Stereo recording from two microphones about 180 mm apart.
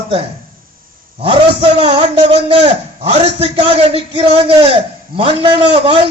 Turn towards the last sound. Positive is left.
turn(degrees=-30)  # may be behind; listen again after turning